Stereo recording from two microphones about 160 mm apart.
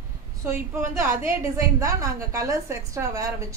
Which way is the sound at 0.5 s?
15° right (ahead or behind).